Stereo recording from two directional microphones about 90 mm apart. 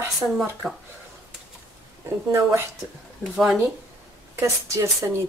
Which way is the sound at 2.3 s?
30° right (ahead or behind).